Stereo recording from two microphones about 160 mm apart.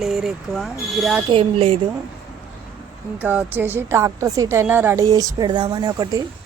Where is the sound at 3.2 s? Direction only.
10° right (ahead or behind).